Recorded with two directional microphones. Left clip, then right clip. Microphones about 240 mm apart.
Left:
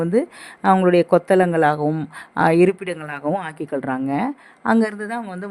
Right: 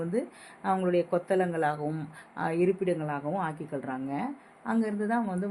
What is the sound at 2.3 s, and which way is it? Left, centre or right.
Speech, left.